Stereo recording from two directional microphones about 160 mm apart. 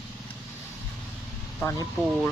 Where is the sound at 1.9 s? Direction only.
Centre (ahead or behind).